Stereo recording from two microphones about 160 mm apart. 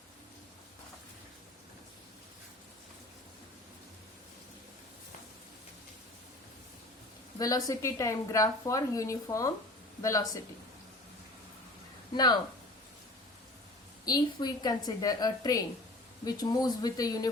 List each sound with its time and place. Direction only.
7.3 s a woman's voice: 20° left (ahead or behind)
12.1 s a woman's voice: 25° left (ahead or behind)
14.0 s a woman's voice: 25° left (ahead or behind)